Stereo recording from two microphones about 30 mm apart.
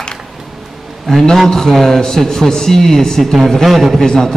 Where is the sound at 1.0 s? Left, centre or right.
Centre.